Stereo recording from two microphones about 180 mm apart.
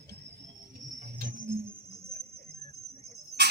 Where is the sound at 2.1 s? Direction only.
55° right (ahead or behind).